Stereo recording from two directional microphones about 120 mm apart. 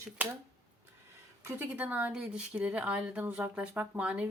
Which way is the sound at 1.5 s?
20° right (ahead or behind).